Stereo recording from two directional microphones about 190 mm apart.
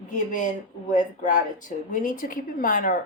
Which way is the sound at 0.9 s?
40° left (ahead or behind).